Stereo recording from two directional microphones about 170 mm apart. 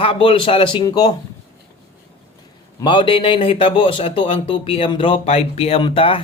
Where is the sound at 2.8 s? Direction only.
30° left (ahead or behind).